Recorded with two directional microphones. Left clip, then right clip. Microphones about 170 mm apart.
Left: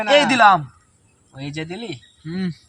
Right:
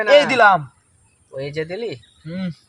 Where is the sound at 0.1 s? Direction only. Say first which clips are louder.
Right 1 dB; 20° right (ahead or behind).